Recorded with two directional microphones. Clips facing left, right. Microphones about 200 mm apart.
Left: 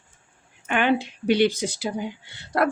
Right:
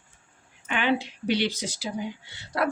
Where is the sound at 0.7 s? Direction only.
50° left (ahead or behind).